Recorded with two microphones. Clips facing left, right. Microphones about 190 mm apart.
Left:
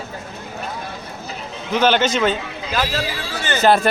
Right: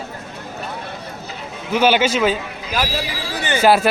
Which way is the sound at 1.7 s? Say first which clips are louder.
Right 1 dB; 10° right (ahead or behind).